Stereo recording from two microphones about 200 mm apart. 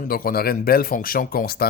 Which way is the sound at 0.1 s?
45° left (ahead or behind).